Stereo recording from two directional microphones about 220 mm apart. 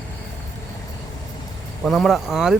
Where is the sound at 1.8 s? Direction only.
Centre (ahead or behind).